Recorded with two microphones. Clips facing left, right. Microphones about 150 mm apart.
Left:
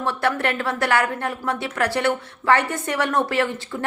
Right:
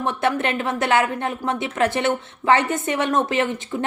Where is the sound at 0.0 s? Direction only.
20° right (ahead or behind).